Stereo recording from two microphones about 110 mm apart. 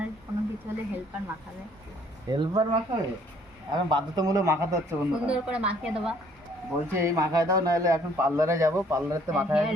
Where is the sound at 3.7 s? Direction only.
40° right (ahead or behind).